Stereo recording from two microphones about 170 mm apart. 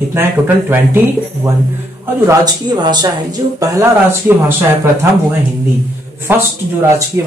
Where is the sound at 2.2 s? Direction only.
25° right (ahead or behind).